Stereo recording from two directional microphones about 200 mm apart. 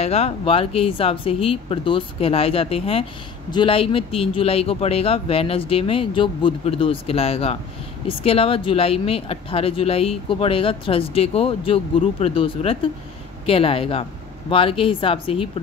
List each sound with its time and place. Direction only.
0.0 s speech: 30° left (ahead or behind)